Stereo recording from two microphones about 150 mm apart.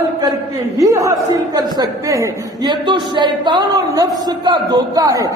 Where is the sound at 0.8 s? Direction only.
20° right (ahead or behind).